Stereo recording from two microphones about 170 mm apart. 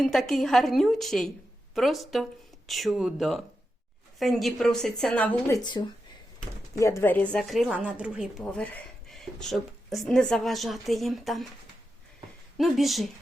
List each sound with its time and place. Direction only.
0.0 s a woman's voice: centre (ahead or behind)
5.8 s a woman's voice: 25° left (ahead or behind); by 11.4 s centre (ahead or behind)
12.5 s a woman's voice: centre (ahead or behind)